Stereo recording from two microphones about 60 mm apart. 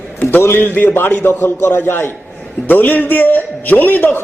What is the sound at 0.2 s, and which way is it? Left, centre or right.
A man's voice, left.